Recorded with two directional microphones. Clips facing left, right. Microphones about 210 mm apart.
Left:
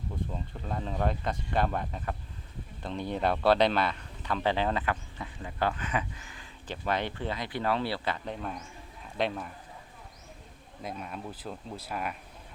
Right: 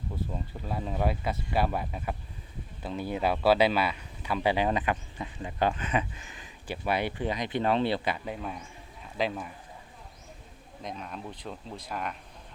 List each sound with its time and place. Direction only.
0.2 s speech: 5° right (ahead or behind)
10.8 s speech: 5° left (ahead or behind)